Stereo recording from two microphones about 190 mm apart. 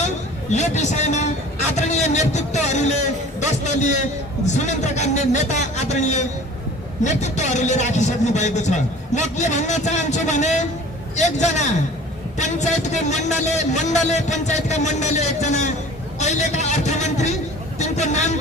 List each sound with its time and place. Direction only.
0.5 s a man's voice: 35° left (ahead or behind)